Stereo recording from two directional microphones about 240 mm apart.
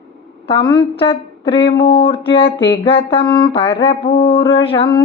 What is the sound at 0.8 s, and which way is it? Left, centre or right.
Female singing, left.